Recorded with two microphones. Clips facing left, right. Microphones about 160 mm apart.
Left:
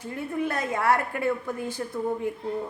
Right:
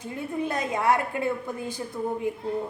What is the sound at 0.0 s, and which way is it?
A woman's voice, 15° right (ahead or behind).